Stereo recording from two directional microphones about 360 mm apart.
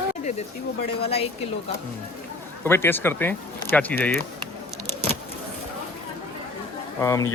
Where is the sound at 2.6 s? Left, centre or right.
Centre.